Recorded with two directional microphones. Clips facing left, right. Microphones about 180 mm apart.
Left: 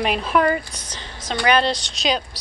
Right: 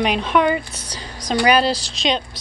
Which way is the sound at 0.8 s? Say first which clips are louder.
Right 3 dB; 35° right (ahead or behind).